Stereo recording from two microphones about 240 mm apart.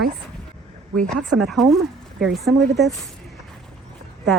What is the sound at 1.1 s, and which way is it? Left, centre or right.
Speech, right.